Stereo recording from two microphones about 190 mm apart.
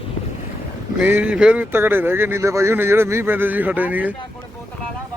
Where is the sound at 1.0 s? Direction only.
10° right (ahead or behind).